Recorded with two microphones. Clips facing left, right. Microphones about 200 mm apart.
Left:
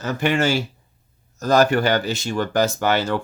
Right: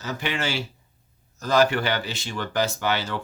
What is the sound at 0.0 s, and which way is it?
Speech, 50° left (ahead or behind).